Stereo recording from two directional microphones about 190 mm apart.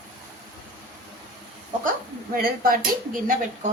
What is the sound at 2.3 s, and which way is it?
Speech, 50° right (ahead or behind).